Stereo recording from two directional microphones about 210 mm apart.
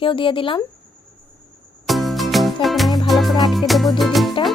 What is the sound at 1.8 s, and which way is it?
Music, centre (ahead or behind).